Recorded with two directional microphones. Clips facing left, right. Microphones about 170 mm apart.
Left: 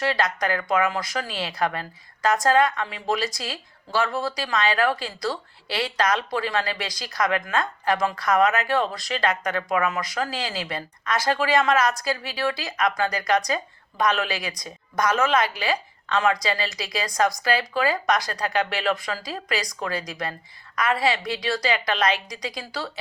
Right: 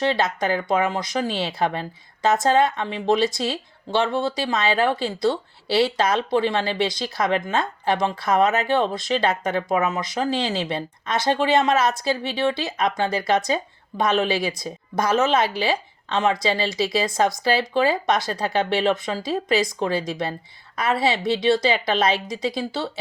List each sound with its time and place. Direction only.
0.0 s speech: 25° right (ahead or behind)